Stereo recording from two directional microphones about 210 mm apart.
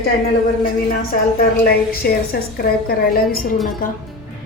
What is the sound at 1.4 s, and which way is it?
A woman's voice, 45° left (ahead or behind).